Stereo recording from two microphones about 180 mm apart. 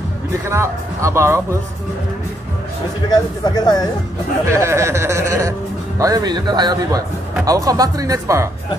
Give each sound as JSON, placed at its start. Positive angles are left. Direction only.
{"t": 0.5, "sound": "speech", "side_deg": -15}
{"t": 3.4, "sound": "speech", "side_deg": 20}
{"t": 4.5, "sound": "speech", "side_deg": -15}